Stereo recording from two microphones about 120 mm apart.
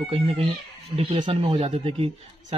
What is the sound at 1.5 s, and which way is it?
A man's voice, 55° right (ahead or behind).